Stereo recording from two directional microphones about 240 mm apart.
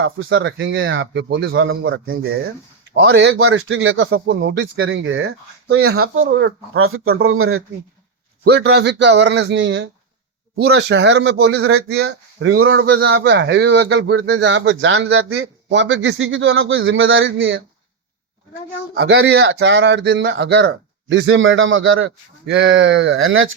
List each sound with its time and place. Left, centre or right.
0.0 s speech: right
2.9 s speech: right
8.4 s speech: right
11.9 s speech: right
12.5 s speech: right
12.7 s speech: right
18.9 s speech: right